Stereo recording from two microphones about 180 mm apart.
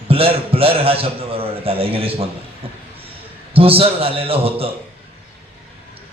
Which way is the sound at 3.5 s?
30° right (ahead or behind).